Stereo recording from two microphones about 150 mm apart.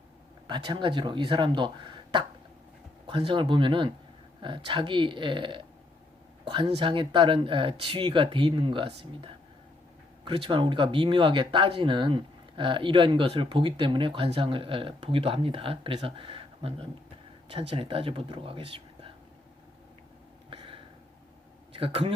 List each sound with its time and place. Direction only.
0.4 s speech: 30° right (ahead or behind)
20.5 s a sound: 35° right (ahead or behind)
21.7 s speech: 35° right (ahead or behind)